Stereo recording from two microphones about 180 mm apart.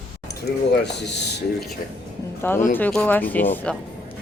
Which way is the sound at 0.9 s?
70° left (ahead or behind).